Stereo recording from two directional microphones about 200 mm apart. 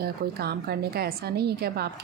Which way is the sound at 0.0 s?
50° right (ahead or behind).